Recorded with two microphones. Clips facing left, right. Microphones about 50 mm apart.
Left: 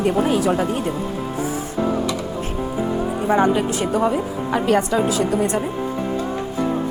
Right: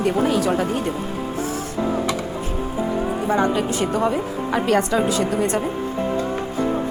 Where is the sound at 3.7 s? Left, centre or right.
Centre.